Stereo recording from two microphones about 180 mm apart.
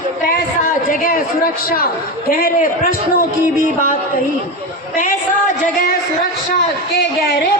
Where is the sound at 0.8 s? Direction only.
50° left (ahead or behind).